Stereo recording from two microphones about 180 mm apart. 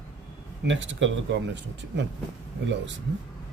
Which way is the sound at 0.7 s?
90° right.